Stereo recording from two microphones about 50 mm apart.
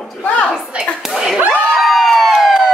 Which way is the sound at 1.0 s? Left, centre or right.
Centre.